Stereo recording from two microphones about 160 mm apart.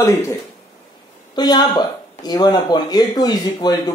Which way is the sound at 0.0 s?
15° left (ahead or behind).